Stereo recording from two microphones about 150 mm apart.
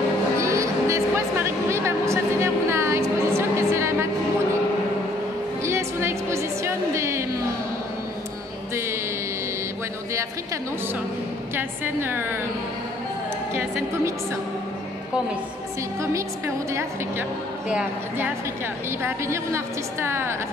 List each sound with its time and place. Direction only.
0.4 s music: 20° right (ahead or behind)
5.7 s music: 15° right (ahead or behind)
11.5 s a woman's voice: 15° right (ahead or behind)
13.6 s a woman's voice: 20° right (ahead or behind)
16.0 s a woman's voice: 20° right (ahead or behind)
17.6 s a woman's voice: 5° right (ahead or behind)
19.0 s a woman's voice: 20° right (ahead or behind)